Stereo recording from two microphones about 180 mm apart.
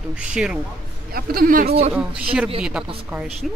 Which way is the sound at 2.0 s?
5° right (ahead or behind).